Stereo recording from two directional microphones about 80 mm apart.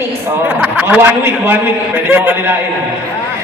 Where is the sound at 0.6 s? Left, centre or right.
Centre.